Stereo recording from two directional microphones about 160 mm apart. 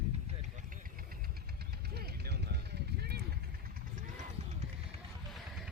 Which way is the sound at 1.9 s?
90° right.